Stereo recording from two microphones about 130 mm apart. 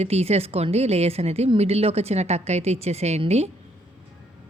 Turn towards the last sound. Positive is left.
turn(degrees=-55)  # may be behind; listen again after turning